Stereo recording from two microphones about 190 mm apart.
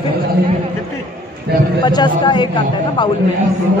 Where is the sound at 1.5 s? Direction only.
60° right (ahead or behind).